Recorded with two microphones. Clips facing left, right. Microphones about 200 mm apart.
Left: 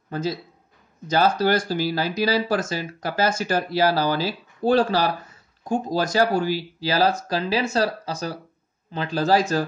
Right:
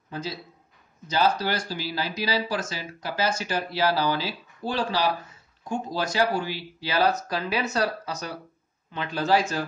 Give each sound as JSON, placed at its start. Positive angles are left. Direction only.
{"t": 1.0, "sound": "speech", "side_deg": 45}